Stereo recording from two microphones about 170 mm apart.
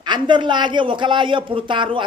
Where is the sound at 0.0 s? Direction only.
25° right (ahead or behind).